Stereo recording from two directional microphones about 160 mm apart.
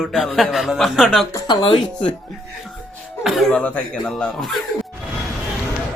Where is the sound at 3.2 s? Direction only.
5° left (ahead or behind).